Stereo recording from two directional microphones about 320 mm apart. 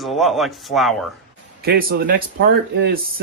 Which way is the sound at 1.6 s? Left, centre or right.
Right.